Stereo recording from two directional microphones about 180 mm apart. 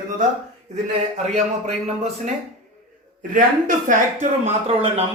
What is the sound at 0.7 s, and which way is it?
Speech, 40° right (ahead or behind).